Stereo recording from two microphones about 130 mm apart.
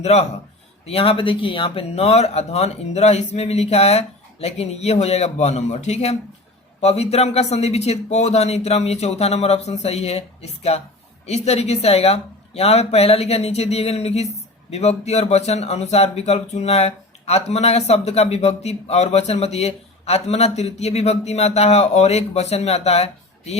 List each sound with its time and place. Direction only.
0.0 s a man's voice: 55° left (ahead or behind)